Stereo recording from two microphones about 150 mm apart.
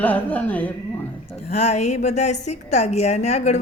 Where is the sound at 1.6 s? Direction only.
50° left (ahead or behind).